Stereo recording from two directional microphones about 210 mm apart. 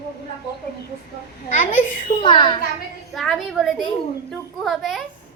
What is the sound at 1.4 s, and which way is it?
Speech, 35° left (ahead or behind).